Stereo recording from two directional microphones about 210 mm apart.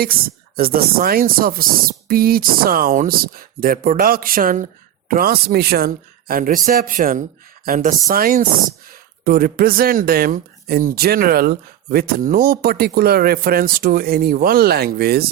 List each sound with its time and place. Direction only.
0.0 s speech: 45° right (ahead or behind)